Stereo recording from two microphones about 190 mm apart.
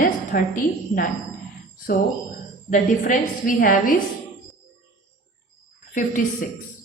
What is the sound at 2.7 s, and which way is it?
A woman's voice, 45° left (ahead or behind).